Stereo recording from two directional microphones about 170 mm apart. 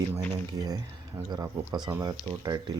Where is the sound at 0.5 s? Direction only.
20° right (ahead or behind).